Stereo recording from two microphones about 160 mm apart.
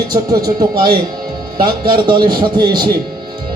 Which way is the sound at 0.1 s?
25° right (ahead or behind).